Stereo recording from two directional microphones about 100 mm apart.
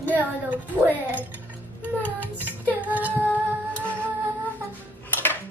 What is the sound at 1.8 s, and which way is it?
Music, 20° left (ahead or behind).